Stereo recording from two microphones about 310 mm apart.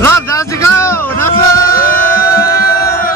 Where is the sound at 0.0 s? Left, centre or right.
Centre.